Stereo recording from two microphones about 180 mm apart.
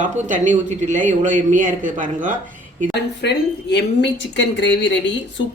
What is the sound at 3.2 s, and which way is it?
A woman's voice, 70° left (ahead or behind).